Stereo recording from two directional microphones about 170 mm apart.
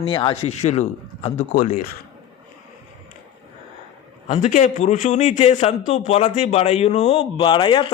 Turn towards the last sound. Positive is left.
turn(degrees=30)  # may be behind; listen again after turning